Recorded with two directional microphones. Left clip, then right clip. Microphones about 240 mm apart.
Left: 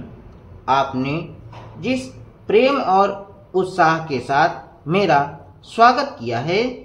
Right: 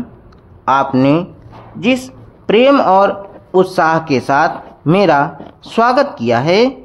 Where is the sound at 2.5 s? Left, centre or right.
Right.